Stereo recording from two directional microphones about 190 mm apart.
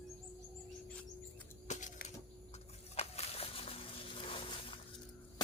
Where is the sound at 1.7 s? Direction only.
40° left (ahead or behind).